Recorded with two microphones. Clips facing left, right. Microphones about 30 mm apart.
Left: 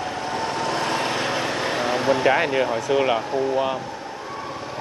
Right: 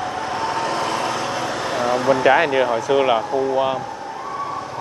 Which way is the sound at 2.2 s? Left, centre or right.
Centre.